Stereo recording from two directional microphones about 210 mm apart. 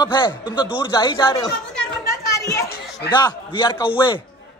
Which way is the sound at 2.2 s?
15° left (ahead or behind).